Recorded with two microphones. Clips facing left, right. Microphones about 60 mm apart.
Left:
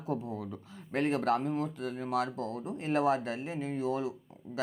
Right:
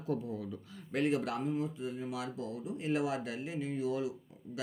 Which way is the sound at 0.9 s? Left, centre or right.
Left.